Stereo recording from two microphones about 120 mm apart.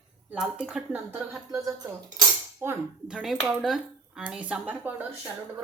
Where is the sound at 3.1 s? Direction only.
5° right (ahead or behind).